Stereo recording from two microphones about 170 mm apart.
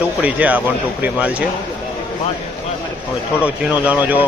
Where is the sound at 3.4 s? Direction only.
10° right (ahead or behind).